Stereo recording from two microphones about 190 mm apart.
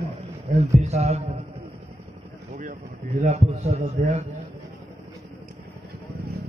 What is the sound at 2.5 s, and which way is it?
A man's voice, 45° right (ahead or behind).